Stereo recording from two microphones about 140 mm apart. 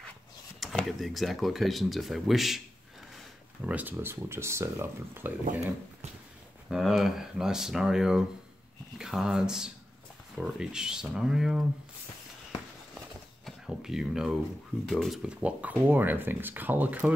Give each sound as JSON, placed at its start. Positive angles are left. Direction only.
{"t": 0.6, "sound": "speech", "side_deg": 0}
{"t": 3.6, "sound": "speech", "side_deg": -10}
{"t": 6.7, "sound": "speech", "side_deg": 0}
{"t": 13.5, "sound": "speech", "side_deg": -5}